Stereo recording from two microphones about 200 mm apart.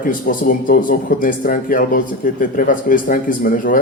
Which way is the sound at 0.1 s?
45° left (ahead or behind).